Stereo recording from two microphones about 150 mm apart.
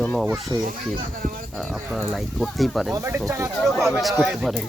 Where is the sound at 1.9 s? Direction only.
Centre (ahead or behind).